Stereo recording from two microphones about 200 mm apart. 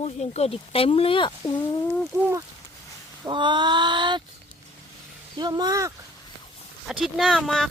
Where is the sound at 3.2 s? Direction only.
25° right (ahead or behind).